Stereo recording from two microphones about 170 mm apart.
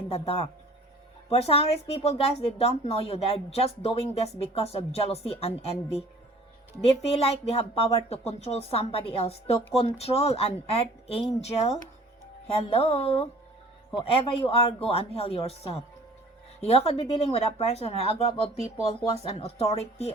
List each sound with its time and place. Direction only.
0.1 s a woman's voice: 35° left (ahead or behind)